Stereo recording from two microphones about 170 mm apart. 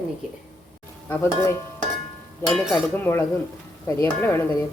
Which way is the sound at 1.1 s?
15° left (ahead or behind).